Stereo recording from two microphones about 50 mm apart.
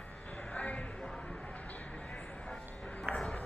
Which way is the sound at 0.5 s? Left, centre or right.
Left.